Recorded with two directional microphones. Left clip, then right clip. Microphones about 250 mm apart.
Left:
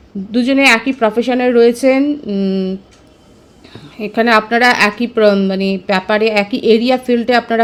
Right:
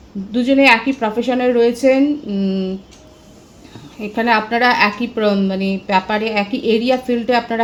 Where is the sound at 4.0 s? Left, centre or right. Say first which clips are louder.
Left 4 dB; left.